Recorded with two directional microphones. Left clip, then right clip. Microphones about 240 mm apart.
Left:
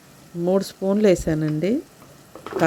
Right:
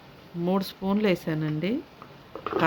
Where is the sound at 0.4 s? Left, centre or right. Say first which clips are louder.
Left 7 dB; centre.